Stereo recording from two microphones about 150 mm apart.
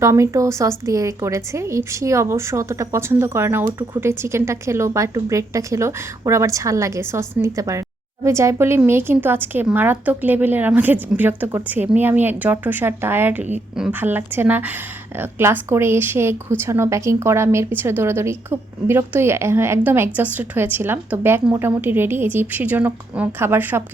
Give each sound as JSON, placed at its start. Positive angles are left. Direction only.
{"t": 0.0, "sound": "a woman's voice", "side_deg": -20}